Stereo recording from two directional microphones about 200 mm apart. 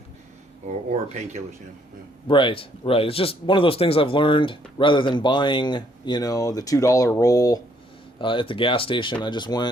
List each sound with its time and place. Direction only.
1.1 s speech: 35° right (ahead or behind)
2.2 s speech: 25° left (ahead or behind)